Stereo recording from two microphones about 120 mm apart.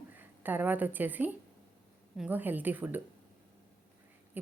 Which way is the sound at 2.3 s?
15° right (ahead or behind).